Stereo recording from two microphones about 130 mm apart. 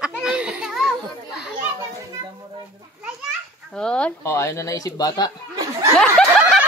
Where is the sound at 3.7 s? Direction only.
5° left (ahead or behind).